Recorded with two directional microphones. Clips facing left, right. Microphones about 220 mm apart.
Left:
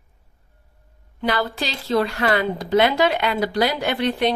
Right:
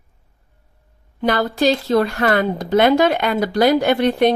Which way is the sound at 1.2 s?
45° right (ahead or behind).